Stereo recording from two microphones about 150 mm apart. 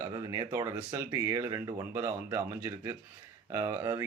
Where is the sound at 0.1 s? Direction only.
30° right (ahead or behind).